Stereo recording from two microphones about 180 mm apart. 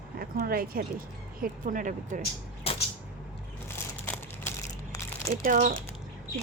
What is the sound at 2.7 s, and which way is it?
Vehicle, 35° left (ahead or behind).